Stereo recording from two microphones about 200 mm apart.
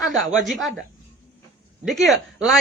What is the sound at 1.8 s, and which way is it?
Speech, centre (ahead or behind).